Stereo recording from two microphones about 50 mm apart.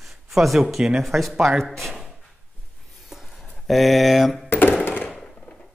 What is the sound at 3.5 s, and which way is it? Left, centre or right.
Speech, centre.